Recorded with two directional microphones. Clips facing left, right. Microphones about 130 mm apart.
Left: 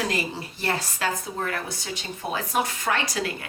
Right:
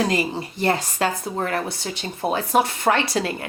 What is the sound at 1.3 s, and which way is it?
Speech, 35° right (ahead or behind).